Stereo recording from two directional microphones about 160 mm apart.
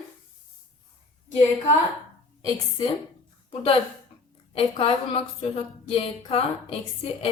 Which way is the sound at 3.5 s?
35° left (ahead or behind).